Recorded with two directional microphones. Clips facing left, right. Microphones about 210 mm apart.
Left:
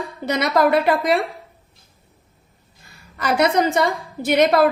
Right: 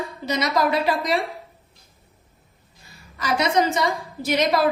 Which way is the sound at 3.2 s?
55° left (ahead or behind).